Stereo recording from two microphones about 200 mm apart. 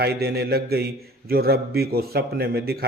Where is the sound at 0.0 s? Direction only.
50° right (ahead or behind).